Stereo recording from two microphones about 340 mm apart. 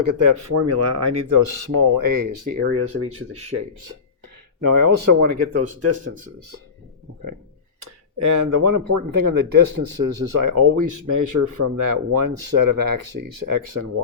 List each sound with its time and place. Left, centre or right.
0.0 s speech: right
1.4 s speech: right
2.6 s speech: right
3.5 s speech: right
4.6 s speech: right
7.8 s speech: right